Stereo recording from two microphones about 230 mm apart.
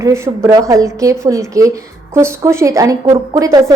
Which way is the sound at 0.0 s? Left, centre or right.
Centre.